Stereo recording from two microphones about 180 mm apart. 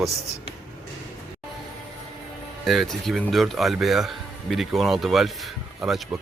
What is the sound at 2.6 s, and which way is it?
A man's voice, centre (ahead or behind).